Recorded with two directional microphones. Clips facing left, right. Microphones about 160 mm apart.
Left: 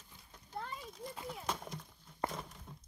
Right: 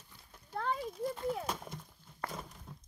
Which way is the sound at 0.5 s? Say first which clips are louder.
Right 8 dB; 85° right.